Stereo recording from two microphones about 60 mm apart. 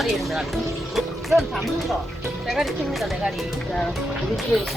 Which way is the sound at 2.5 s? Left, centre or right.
Centre.